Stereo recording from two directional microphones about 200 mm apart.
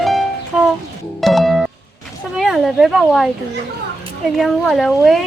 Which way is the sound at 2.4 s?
Centre (ahead or behind).